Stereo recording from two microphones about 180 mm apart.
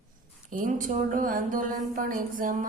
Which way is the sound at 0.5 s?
50° right (ahead or behind).